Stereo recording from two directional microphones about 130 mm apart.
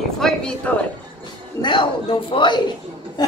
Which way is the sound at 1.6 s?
40° left (ahead or behind).